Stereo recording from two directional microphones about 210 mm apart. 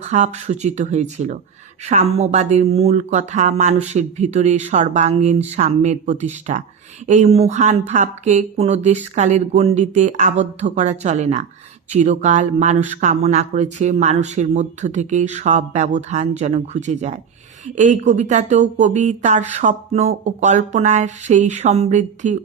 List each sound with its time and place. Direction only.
0.0 s speech: 35° right (ahead or behind)